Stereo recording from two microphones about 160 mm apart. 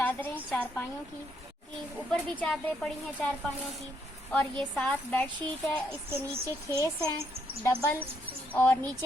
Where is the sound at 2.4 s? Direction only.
5° left (ahead or behind).